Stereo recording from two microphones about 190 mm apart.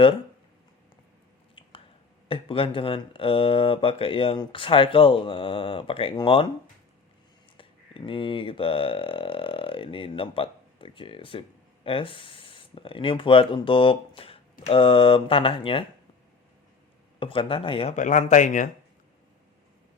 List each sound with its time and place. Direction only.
2.3 s speech: 30° left (ahead or behind)
7.5 s speech: 30° left (ahead or behind)
17.2 s speech: 30° left (ahead or behind)